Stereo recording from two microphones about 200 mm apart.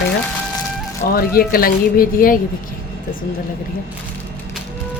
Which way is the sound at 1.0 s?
45° left (ahead or behind).